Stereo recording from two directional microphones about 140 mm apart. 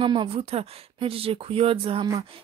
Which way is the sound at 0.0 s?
35° right (ahead or behind).